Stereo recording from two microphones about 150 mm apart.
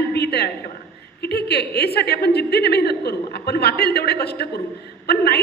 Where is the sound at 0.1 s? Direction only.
90° left.